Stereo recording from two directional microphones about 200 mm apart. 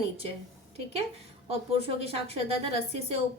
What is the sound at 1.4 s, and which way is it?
A woman's voice, 30° right (ahead or behind).